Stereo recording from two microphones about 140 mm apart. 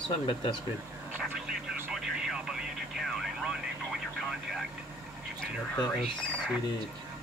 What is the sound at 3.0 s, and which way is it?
Speech, centre (ahead or behind).